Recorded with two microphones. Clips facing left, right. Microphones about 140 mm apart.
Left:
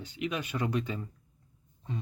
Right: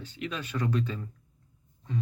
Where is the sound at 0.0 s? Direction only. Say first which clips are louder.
Left 2 dB; 15° left (ahead or behind).